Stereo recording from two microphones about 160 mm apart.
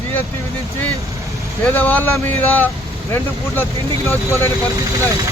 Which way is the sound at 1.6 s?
10° left (ahead or behind).